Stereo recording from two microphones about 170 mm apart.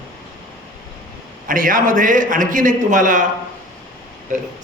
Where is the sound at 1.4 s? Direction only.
55° right (ahead or behind).